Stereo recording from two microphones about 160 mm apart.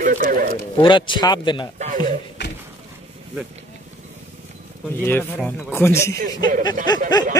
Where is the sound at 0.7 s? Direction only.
30° left (ahead or behind).